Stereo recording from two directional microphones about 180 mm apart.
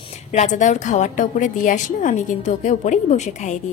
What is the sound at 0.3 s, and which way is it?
A woman's voice, 40° left (ahead or behind).